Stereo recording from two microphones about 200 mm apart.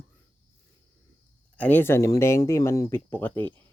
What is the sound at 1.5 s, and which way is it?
Speech, 10° left (ahead or behind).